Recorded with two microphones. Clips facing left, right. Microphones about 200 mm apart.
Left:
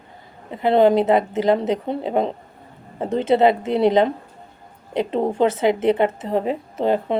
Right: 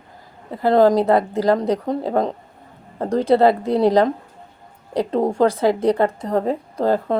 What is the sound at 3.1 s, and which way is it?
Speech, 25° left (ahead or behind).